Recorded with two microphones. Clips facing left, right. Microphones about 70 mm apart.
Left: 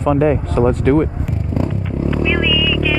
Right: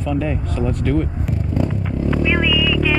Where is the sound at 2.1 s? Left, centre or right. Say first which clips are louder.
Left 1 dB; centre.